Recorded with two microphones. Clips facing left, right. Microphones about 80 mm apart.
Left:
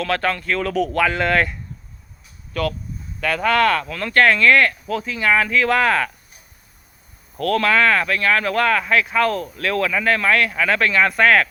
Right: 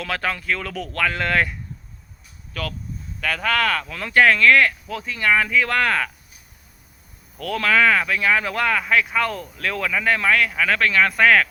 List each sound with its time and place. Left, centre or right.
0.0 s speech: centre
7.4 s speech: centre